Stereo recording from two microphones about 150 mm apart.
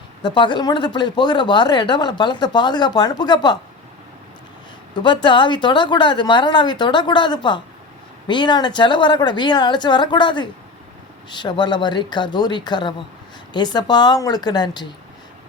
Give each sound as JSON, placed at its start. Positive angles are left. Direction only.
{"t": 0.2, "sound": "speech", "side_deg": 30}
{"t": 4.9, "sound": "speech", "side_deg": 30}